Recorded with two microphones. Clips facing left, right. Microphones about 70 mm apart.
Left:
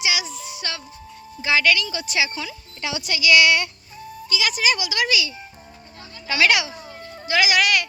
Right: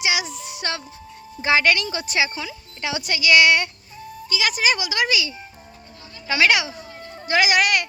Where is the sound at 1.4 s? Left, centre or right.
Right.